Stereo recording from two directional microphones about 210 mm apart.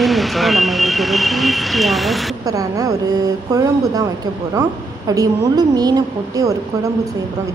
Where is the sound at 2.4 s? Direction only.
15° right (ahead or behind).